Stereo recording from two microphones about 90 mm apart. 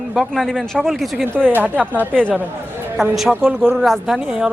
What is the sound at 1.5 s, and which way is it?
Speech, 20° right (ahead or behind).